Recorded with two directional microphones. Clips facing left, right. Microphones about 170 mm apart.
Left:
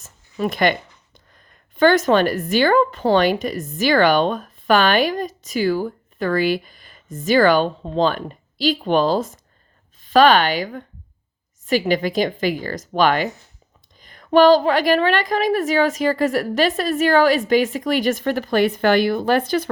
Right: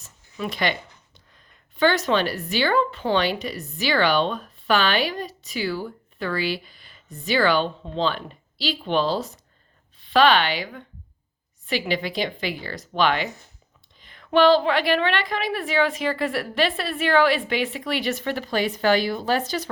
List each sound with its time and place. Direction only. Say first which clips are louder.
0.0 s a woman's voice: left 7 dB; 45° left (ahead or behind)